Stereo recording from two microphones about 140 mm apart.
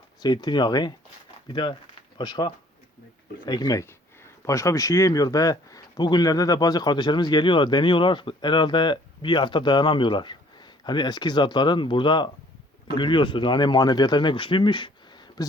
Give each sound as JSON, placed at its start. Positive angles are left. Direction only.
{"t": 0.2, "sound": "speech", "side_deg": 30}